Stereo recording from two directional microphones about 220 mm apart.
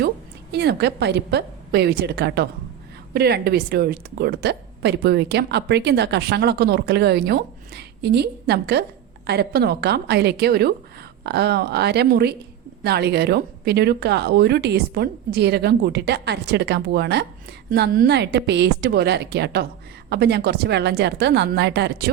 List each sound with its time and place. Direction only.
0.5 s a woman's voice: 50° right (ahead or behind)